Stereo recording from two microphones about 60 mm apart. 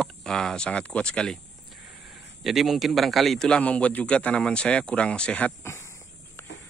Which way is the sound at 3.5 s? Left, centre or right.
Left.